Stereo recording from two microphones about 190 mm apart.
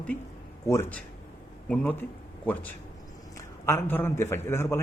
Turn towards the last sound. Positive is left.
turn(degrees=15)  # may be behind; listen again after turning